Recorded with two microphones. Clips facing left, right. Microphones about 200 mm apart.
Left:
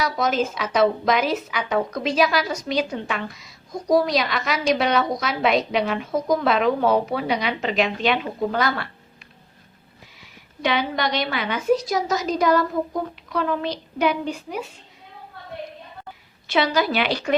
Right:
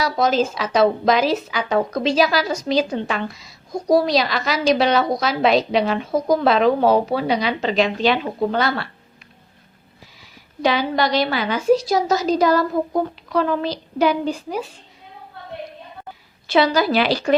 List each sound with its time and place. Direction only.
0.0 s a woman's voice: 30° right (ahead or behind)
10.6 s a woman's voice: 35° right (ahead or behind)
16.5 s a woman's voice: 35° right (ahead or behind)